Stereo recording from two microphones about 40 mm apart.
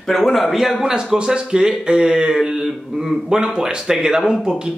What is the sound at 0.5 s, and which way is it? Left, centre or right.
Speech, centre.